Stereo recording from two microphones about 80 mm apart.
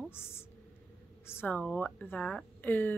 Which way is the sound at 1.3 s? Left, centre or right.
Left.